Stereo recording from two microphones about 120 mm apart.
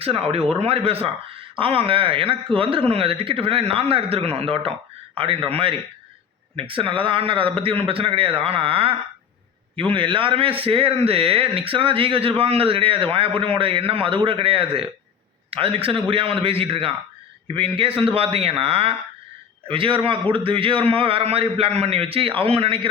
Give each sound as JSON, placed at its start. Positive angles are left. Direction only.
{"t": 0.0, "sound": "a man's voice", "side_deg": -55}